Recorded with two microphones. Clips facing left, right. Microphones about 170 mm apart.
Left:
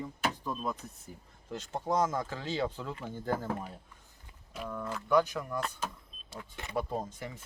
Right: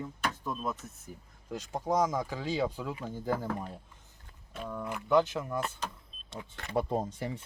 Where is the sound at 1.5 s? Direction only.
10° right (ahead or behind).